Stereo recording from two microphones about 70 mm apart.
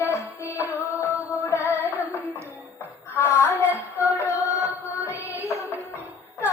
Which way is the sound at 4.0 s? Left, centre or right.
Left.